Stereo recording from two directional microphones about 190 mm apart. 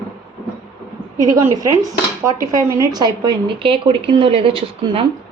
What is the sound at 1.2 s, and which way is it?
A woman's voice, 20° right (ahead or behind).